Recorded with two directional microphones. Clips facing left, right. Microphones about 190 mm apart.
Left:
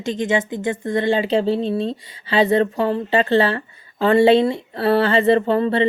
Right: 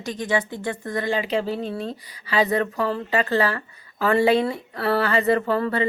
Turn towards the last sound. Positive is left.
turn(degrees=25)  # may be behind; listen again after turning